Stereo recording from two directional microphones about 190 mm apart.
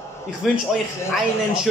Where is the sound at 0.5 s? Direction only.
Centre (ahead or behind).